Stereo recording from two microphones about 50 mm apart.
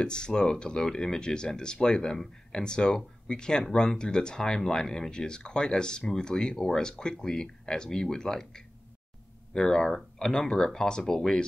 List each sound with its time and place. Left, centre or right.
0.0 s speech: centre